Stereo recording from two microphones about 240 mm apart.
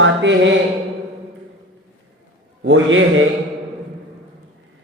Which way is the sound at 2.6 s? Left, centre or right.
Right.